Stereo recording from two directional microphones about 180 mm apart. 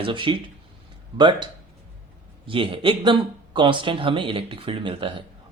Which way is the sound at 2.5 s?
30° right (ahead or behind).